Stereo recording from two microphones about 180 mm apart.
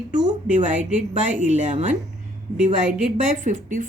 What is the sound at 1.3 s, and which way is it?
Speech, 45° right (ahead or behind).